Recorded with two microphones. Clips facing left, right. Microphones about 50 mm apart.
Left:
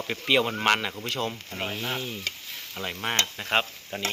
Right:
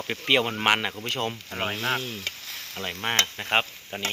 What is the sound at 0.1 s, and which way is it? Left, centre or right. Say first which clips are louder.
Speech: right 1 dB; centre.